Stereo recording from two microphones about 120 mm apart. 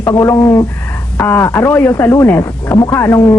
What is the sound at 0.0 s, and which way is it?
Speech, 20° left (ahead or behind).